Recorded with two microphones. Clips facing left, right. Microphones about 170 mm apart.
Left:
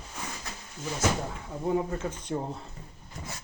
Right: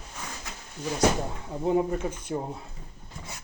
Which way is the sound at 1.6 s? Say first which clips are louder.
Right 3 dB; 15° right (ahead or behind).